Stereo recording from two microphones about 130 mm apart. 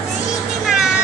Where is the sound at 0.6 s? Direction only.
5° right (ahead or behind).